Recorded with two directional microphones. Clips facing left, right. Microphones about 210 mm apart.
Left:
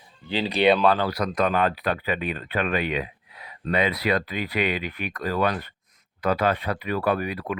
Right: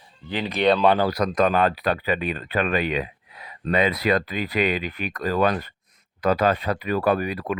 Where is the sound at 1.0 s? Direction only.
40° right (ahead or behind).